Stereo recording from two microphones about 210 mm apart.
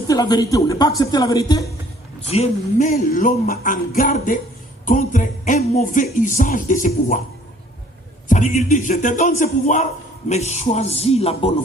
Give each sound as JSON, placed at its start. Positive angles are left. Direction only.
{"t": 0.1, "sound": "speech", "side_deg": 20}
{"t": 2.2, "sound": "music", "side_deg": 30}
{"t": 8.3, "sound": "music", "side_deg": 35}